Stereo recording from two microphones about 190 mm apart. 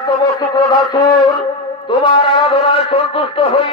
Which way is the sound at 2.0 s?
25° left (ahead or behind).